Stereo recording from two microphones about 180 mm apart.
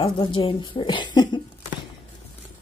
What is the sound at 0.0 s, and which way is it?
Speech, 30° left (ahead or behind).